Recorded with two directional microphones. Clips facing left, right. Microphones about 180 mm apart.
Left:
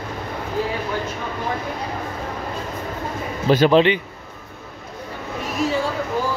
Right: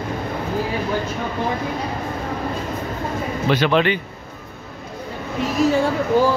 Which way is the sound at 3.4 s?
35° left (ahead or behind).